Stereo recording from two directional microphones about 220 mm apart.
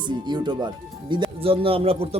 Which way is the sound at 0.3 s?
20° right (ahead or behind).